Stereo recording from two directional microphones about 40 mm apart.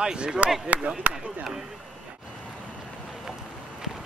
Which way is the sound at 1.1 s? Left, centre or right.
Centre.